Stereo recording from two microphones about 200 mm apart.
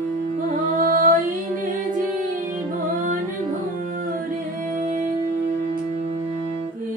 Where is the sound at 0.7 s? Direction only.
45° right (ahead or behind).